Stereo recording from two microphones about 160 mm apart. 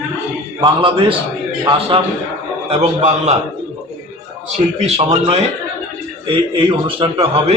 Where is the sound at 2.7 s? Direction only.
40° right (ahead or behind).